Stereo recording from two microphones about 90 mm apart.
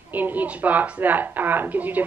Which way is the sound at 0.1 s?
20° right (ahead or behind).